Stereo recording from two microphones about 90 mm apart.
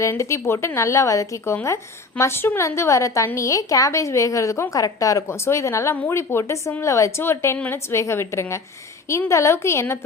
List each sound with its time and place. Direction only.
0.0 s a woman's voice: 35° left (ahead or behind)